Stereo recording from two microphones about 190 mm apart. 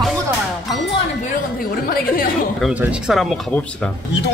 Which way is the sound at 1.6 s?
50° left (ahead or behind).